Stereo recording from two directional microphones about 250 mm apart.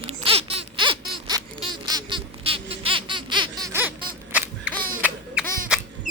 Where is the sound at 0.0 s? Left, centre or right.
Right.